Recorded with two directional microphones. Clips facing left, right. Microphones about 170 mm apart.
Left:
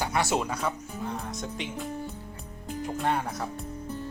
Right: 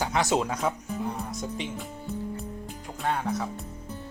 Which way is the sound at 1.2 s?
5° right (ahead or behind).